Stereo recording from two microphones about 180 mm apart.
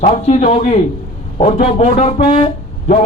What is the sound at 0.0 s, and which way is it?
Speech, 40° left (ahead or behind).